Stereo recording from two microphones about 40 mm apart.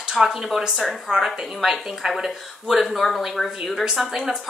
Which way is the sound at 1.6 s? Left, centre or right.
Centre.